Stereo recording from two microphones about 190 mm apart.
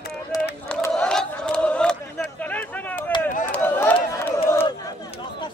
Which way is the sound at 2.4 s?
10° left (ahead or behind).